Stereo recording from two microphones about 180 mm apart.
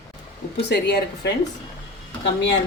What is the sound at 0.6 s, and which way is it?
Speech, 70° left (ahead or behind).